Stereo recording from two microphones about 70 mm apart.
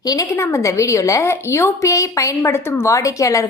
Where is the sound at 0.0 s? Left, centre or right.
Left.